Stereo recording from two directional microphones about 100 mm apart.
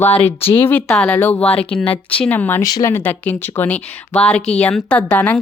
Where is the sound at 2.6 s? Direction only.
40° left (ahead or behind).